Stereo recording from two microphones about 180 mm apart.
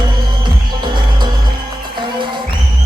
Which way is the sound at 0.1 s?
25° right (ahead or behind).